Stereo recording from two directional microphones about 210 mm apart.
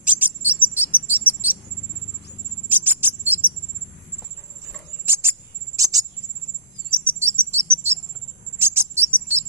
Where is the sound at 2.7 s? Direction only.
10° right (ahead or behind).